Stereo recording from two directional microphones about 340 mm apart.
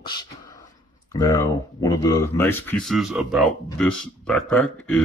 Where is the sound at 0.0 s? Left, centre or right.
Centre.